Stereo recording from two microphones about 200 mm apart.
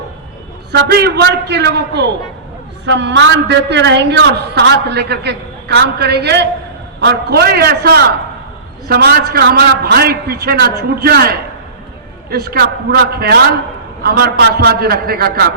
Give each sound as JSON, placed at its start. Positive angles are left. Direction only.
{"t": 0.7, "sound": "a man's voice", "side_deg": -55}
{"t": 12.3, "sound": "a man's voice", "side_deg": -50}